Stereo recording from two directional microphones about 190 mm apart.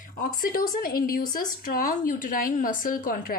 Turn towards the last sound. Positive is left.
turn(degrees=45)  # may be behind; listen again after turning